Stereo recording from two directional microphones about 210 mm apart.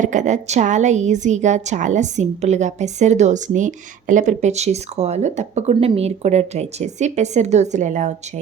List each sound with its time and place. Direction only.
0.0 s a woman's voice: 35° right (ahead or behind)